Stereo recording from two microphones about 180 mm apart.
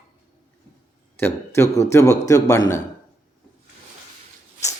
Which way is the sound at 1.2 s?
15° left (ahead or behind).